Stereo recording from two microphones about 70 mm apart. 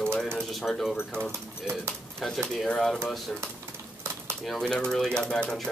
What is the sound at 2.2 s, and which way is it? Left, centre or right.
Speech, centre.